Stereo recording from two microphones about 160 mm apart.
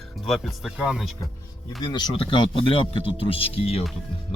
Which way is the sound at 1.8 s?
30° left (ahead or behind).